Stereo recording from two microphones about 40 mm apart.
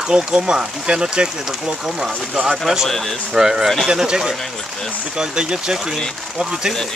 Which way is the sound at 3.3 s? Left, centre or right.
Centre.